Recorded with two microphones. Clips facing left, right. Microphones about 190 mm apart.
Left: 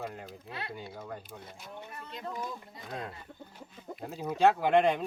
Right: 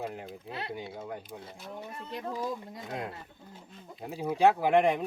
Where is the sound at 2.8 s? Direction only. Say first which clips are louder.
Right 1 dB; 10° right (ahead or behind).